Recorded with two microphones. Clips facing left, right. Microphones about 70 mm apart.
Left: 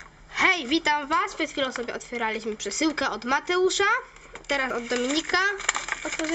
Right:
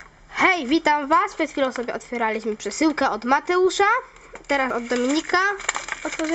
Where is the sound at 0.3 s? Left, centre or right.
Right.